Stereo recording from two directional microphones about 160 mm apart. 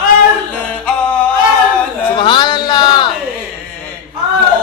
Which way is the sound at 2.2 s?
30° left (ahead or behind).